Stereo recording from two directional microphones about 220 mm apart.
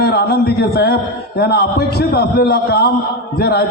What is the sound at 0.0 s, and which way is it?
A man's voice, 45° left (ahead or behind).